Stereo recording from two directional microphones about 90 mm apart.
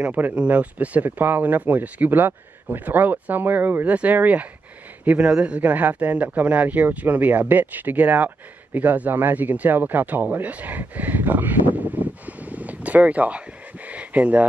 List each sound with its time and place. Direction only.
0.0 s speech: 15° right (ahead or behind)